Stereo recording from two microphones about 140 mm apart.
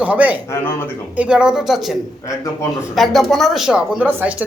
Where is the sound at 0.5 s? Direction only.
15° left (ahead or behind).